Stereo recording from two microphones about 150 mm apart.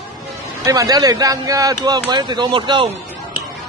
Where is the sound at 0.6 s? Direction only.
25° right (ahead or behind).